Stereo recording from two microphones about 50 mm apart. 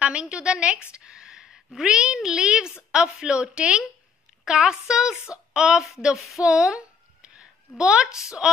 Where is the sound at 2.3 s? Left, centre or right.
Centre.